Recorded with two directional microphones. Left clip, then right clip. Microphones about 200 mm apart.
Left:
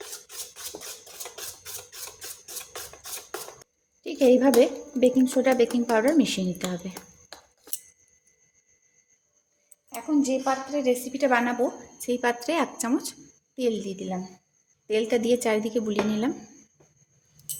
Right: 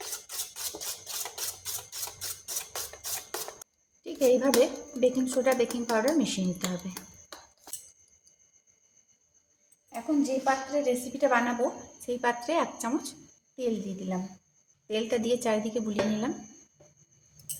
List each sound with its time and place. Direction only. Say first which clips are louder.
4.0 s speech: left 4 dB; 35° left (ahead or behind)
9.9 s a woman's voice: left 3 dB; 35° left (ahead or behind)